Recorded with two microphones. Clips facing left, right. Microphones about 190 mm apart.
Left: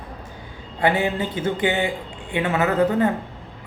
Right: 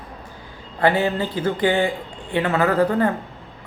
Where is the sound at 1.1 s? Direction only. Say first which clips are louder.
Right 1 dB; 25° left (ahead or behind).